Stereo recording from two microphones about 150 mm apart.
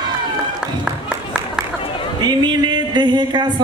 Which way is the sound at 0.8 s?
5° right (ahead or behind).